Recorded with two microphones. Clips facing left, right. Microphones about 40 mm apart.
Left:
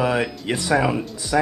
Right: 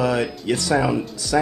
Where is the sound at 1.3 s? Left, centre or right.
Centre.